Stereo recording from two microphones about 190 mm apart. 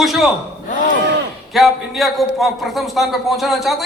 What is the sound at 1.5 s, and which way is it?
A man's voice, centre (ahead or behind).